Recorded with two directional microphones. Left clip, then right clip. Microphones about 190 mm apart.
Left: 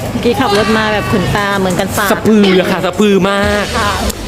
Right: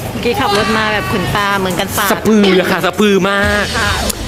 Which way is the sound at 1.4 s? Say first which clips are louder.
Right 1 dB; 15° left (ahead or behind).